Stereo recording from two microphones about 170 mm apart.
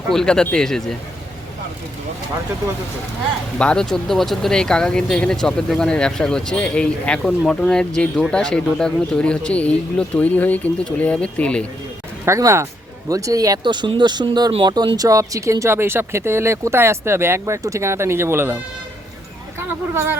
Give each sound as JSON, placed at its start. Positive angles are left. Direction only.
{"t": 0.1, "sound": "speech", "side_deg": 5}
{"t": 3.6, "sound": "speech", "side_deg": 5}
{"t": 12.2, "sound": "speech", "side_deg": -15}
{"t": 19.5, "sound": "speech", "side_deg": -15}